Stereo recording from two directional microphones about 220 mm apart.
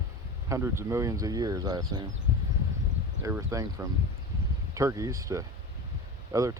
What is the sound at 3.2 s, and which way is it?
Speech, 15° right (ahead or behind).